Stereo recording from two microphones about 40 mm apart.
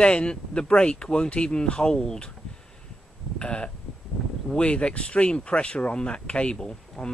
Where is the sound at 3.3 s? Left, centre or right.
Left.